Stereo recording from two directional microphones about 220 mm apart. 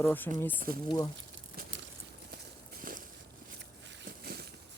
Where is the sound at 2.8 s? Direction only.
40° right (ahead or behind).